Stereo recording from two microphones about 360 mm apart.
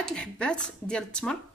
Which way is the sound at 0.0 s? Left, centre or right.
Centre.